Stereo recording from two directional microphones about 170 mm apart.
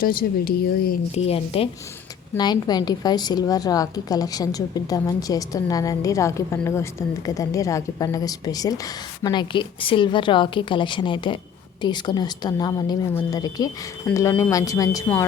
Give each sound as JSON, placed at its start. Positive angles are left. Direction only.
{"t": 0.0, "sound": "speech", "side_deg": 60}
{"t": 1.1, "sound": "a woman's voice", "side_deg": 35}
{"t": 2.4, "sound": "a woman's voice", "side_deg": 25}